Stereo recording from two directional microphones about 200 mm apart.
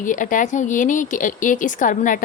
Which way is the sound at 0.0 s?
40° left (ahead or behind).